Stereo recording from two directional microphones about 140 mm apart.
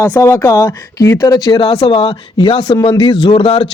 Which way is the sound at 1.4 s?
40° left (ahead or behind).